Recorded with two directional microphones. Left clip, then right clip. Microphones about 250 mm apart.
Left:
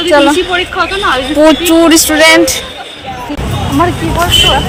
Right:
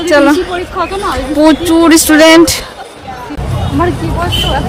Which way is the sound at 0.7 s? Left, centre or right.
Centre.